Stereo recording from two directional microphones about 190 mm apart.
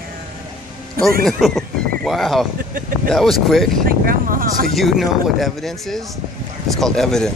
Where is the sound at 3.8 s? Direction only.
50° right (ahead or behind).